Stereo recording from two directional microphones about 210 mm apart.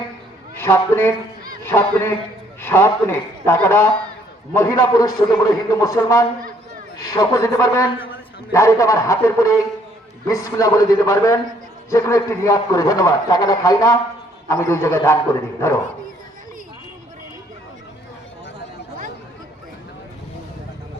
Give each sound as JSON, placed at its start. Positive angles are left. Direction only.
{"t": 0.6, "sound": "a man's voice", "side_deg": 10}